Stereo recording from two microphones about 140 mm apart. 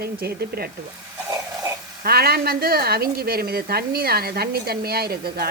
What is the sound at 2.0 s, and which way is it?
Speech, 90° right.